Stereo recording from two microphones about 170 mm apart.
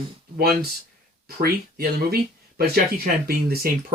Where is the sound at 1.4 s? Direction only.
65° right (ahead or behind).